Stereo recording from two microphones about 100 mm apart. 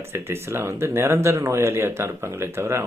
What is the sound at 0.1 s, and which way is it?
Speech, 25° right (ahead or behind).